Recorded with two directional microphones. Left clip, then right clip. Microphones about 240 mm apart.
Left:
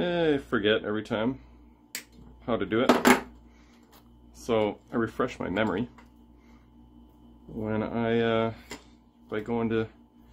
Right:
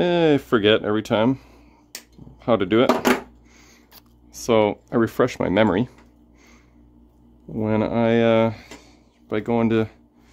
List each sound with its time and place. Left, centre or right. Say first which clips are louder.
0.0 s speech: right 8 dB; right
2.4 s speech: right 9 dB; right
4.3 s speech: right 8 dB; right
7.5 s speech: right 9 dB; right